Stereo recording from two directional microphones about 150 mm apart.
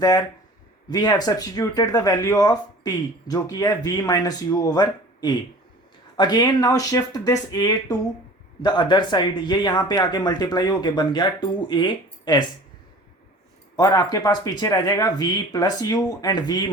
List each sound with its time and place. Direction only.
0.0 s speech: 25° left (ahead or behind)
13.7 s speech: 25° left (ahead or behind)